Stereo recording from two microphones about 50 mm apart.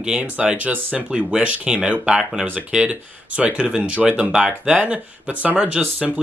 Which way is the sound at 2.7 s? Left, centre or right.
Right.